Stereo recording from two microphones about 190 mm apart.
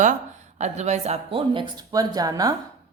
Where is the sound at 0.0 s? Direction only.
40° right (ahead or behind); by 2.6 s 20° right (ahead or behind).